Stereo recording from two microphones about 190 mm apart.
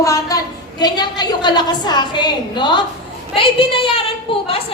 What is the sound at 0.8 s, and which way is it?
A woman's voice, 20° left (ahead or behind).